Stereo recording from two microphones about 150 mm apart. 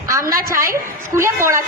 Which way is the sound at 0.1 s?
20° right (ahead or behind).